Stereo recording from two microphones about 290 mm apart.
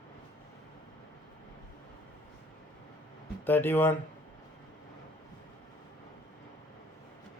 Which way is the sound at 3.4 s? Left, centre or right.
Centre.